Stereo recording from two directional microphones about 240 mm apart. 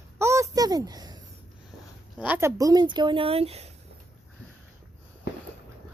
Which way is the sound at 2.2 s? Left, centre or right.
Centre.